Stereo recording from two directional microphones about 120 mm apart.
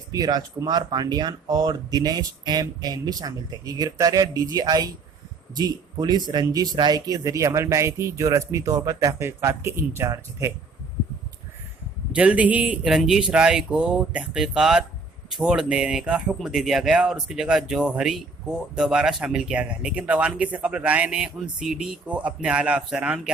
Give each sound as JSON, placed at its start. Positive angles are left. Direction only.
{"t": 0.1, "sound": "speech", "side_deg": -35}
{"t": 12.1, "sound": "speech", "side_deg": -10}